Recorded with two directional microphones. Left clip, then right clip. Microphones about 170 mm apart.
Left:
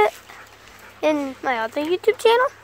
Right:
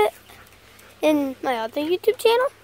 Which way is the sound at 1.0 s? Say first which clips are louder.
Even; 45° right (ahead or behind).